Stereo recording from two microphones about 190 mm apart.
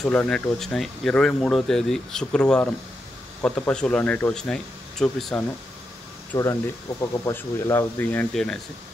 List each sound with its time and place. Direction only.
0.0 s speech: 5° left (ahead or behind)
6.3 s speech: 20° left (ahead or behind)